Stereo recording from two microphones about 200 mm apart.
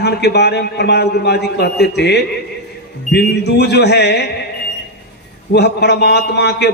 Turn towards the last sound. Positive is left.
turn(degrees=55)  # may be behind; listen again after turning